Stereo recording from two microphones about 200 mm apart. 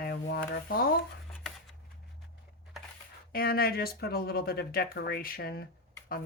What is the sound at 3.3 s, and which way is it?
Speech, 50° left (ahead or behind).